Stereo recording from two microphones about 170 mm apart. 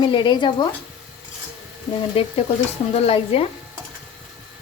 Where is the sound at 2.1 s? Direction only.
35° left (ahead or behind).